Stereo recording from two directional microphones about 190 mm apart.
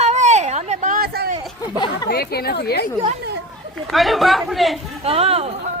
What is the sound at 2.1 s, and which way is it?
Speech, 55° left (ahead or behind).